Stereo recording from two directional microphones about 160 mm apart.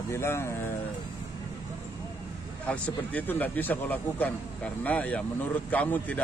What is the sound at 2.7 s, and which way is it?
Speech, 10° left (ahead or behind).